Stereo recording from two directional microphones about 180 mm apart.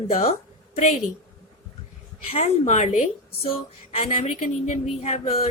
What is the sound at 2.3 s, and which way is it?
A woman's voice, 35° left (ahead or behind).